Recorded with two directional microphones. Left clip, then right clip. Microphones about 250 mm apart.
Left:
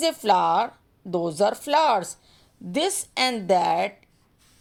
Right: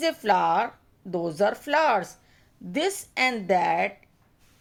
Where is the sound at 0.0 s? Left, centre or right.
Centre.